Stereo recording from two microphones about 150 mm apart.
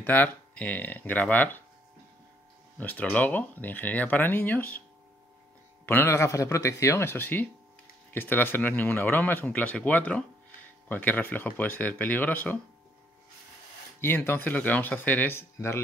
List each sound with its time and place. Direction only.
0.0 s speech: 10° left (ahead or behind)
2.8 s speech: 10° left (ahead or behind)
5.9 s speech: 15° left (ahead or behind)
14.0 s speech: 15° left (ahead or behind)